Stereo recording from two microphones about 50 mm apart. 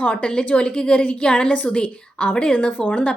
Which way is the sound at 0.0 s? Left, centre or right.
Left.